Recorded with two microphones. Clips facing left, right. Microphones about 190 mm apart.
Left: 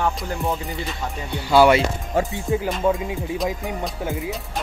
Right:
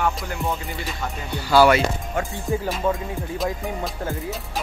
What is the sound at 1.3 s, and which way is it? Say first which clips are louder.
Speech: left 1 dB; 25° left (ahead or behind).